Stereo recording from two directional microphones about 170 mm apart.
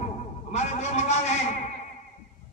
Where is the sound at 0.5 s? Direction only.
40° left (ahead or behind).